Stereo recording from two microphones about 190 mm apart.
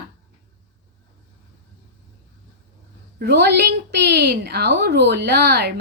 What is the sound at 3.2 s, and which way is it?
A woman's voice, 55° right (ahead or behind).